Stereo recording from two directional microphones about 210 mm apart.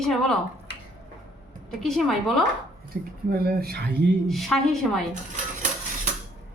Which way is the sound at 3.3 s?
45° right (ahead or behind).